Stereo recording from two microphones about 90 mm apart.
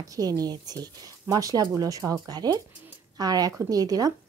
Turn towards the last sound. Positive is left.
turn(degrees=-45)  # may be behind; listen again after turning